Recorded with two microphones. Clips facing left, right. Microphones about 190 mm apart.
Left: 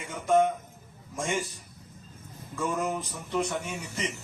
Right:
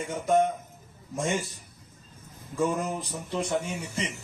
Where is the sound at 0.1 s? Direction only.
40° right (ahead or behind).